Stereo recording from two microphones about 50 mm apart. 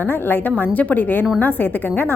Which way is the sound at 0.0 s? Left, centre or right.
Left.